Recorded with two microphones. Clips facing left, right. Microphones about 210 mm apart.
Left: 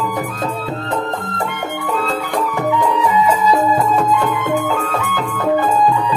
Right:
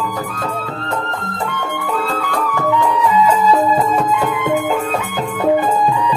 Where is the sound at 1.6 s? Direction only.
20° left (ahead or behind).